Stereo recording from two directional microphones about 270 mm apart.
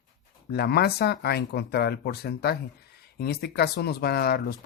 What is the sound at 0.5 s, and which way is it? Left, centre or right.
Speech, left.